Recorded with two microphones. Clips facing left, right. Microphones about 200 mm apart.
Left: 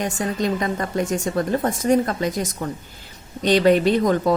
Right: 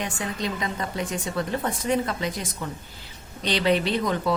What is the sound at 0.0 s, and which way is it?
Speech, 45° left (ahead or behind).